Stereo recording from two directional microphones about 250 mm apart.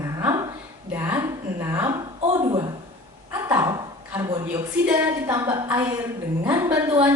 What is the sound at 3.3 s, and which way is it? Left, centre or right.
Dog, centre.